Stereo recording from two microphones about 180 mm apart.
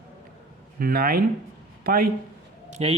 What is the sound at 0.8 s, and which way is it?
A man's voice, 55° right (ahead or behind).